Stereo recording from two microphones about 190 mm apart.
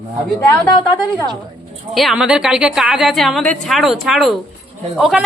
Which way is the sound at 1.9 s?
Centre (ahead or behind).